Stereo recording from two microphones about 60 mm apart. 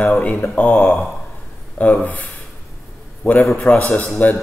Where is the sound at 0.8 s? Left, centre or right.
Centre.